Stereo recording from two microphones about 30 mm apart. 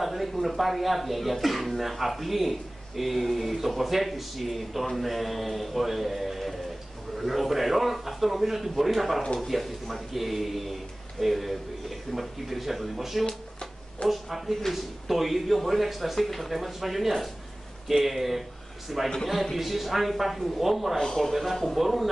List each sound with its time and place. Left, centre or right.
0.0 s speech: centre
13.2 s speech: left
14.0 s speech: centre
21.0 s speech: centre
21.3 s speech: centre